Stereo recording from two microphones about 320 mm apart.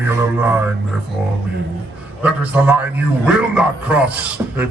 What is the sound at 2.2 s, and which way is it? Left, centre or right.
A man's voice, centre.